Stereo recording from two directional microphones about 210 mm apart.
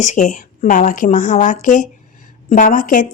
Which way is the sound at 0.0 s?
35° left (ahead or behind).